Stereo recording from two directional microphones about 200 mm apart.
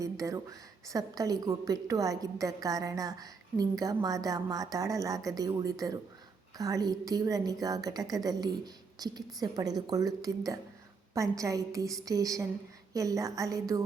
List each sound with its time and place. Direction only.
0.0 s a woman's voice: 15° right (ahead or behind)